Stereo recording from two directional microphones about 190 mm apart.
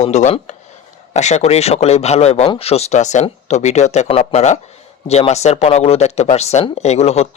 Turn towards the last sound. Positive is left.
turn(degrees=35)  # may be behind; listen again after turning